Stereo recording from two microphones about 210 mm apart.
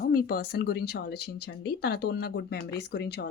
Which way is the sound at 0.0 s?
45° left (ahead or behind).